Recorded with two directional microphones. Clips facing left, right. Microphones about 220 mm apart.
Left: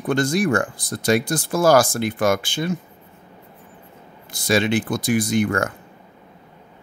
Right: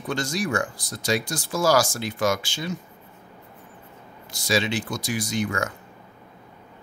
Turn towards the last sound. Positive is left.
turn(degrees=55)  # may be behind; listen again after turning